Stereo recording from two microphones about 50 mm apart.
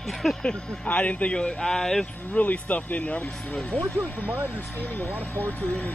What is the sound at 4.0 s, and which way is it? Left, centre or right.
Speech, right.